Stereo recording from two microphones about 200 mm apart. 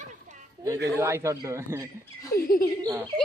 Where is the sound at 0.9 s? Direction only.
15° right (ahead or behind).